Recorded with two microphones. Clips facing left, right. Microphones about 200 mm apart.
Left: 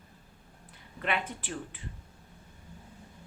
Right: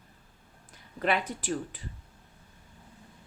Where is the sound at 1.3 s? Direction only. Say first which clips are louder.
Right 6 dB; 40° right (ahead or behind).